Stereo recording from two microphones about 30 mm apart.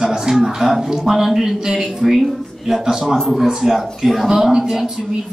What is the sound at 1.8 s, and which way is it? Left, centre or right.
A man's voice, centre.